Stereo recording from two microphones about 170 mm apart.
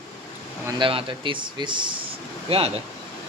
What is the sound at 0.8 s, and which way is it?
Speech, 30° right (ahead or behind).